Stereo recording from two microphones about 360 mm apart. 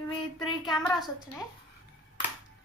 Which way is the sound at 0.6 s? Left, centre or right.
Centre.